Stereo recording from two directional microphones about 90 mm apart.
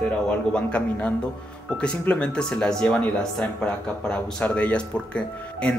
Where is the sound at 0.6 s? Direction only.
15° left (ahead or behind).